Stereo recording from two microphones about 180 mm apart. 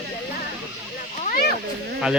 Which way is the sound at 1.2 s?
50° left (ahead or behind).